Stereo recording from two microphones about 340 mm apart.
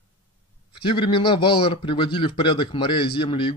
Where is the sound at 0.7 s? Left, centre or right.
Centre.